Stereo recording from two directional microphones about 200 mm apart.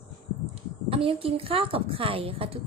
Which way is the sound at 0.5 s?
30° right (ahead or behind).